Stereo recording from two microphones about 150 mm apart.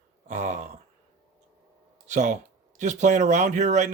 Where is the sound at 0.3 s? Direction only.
55° right (ahead or behind).